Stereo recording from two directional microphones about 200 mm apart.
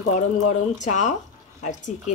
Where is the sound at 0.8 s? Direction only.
35° left (ahead or behind).